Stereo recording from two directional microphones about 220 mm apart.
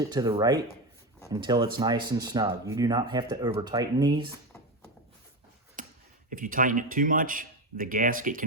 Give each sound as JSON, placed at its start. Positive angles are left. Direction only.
{"t": 0.1, "sound": "speech", "side_deg": -15}
{"t": 5.8, "sound": "a sound", "side_deg": -35}
{"t": 6.3, "sound": "speech", "side_deg": -40}